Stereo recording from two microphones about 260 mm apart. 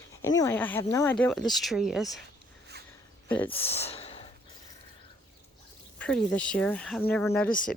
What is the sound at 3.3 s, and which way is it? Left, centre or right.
Speech, centre.